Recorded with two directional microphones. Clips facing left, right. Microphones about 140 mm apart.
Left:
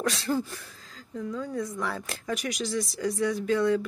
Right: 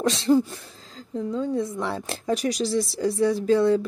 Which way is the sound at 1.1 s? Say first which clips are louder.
Right 6 dB; 25° right (ahead or behind).